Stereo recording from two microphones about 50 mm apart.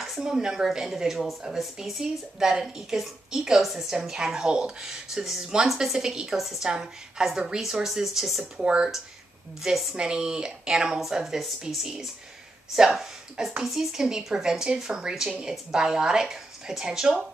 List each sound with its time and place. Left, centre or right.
0.2 s speech: centre
6.7 s speech: centre
8.5 s speech: centre
9.6 s speech: centre